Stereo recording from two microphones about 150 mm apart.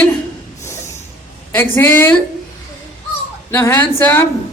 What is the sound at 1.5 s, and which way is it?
Speech, 10° left (ahead or behind).